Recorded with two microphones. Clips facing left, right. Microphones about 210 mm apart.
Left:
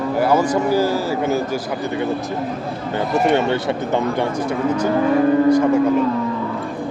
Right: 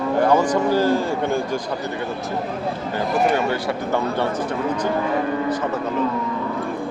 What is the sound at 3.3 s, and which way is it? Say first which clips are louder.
Speech: left 4 dB; 25° left (ahead or behind).